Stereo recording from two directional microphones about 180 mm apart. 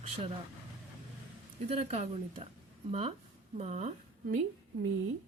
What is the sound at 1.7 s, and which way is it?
A woman's voice, 35° right (ahead or behind).